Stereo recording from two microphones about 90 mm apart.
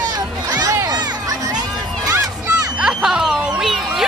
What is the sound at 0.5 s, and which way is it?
Music, 40° right (ahead or behind).